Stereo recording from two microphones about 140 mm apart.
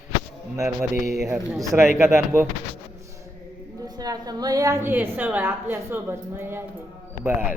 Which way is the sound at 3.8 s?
30° right (ahead or behind).